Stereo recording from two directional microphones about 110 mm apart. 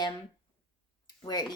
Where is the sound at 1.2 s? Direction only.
40° left (ahead or behind).